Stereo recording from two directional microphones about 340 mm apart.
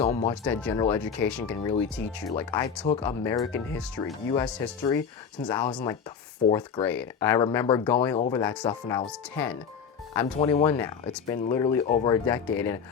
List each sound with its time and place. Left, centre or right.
0.0 s speech: centre
0.4 s speech: centre